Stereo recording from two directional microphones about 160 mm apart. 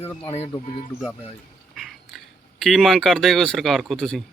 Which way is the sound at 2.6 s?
Centre (ahead or behind).